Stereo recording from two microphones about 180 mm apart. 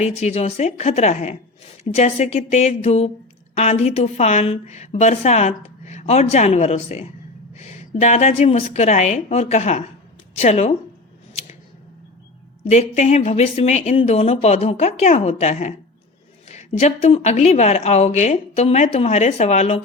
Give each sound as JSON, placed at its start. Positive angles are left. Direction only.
{"t": 0.0, "sound": "a woman's voice", "side_deg": 40}
{"t": 12.6, "sound": "a woman's voice", "side_deg": 35}